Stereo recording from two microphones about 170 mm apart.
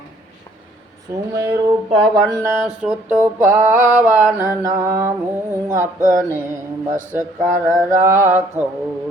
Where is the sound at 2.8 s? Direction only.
10° right (ahead or behind).